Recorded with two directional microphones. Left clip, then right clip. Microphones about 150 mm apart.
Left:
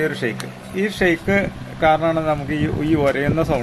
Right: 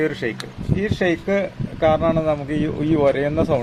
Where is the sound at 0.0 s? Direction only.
45° right (ahead or behind).